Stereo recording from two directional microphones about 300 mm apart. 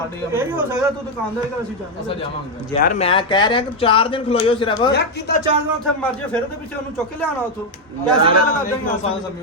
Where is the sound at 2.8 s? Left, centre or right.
Left.